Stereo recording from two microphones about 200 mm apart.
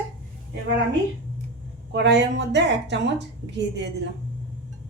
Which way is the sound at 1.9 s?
60° right (ahead or behind).